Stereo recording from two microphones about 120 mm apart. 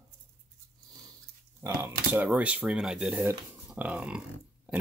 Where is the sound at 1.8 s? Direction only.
15° right (ahead or behind).